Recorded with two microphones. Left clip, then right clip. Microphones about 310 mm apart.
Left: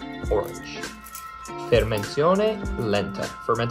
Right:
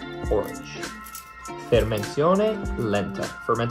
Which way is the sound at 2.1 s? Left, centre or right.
Left.